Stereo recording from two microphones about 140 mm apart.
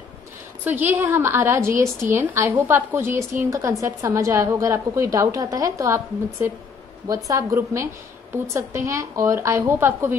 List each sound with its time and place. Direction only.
0.7 s a woman's voice: 15° right (ahead or behind)